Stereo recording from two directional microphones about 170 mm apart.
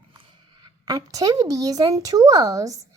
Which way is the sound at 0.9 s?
20° right (ahead or behind).